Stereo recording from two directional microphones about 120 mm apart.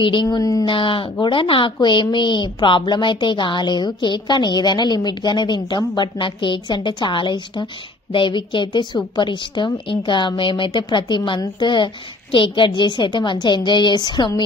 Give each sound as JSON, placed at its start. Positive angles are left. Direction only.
{"t": 0.0, "sound": "speech", "side_deg": 40}
{"t": 0.4, "sound": "speech", "side_deg": 30}
{"t": 0.7, "sound": "a woman's voice", "side_deg": 45}